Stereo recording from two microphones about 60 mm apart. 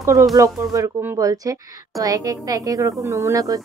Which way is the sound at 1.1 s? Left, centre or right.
Right.